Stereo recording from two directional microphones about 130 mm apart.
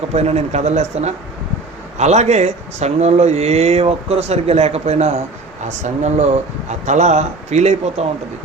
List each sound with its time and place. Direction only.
0.1 s speech: 55° right (ahead or behind)